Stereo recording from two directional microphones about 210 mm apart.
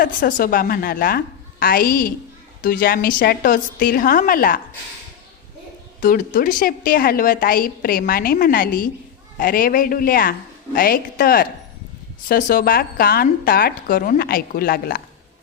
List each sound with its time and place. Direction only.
0.0 s a woman's voice: 40° left (ahead or behind)
6.0 s a woman's voice: 40° left (ahead or behind)